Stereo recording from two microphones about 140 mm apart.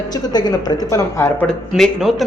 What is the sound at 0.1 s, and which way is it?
Speech, 30° left (ahead or behind).